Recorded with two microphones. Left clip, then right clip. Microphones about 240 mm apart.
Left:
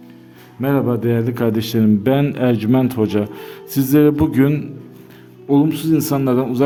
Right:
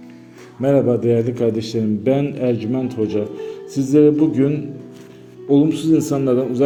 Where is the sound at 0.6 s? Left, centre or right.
Centre.